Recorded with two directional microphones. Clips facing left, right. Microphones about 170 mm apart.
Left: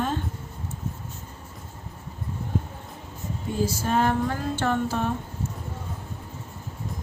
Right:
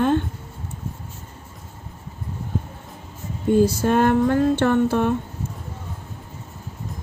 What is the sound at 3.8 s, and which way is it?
Music, 60° right (ahead or behind).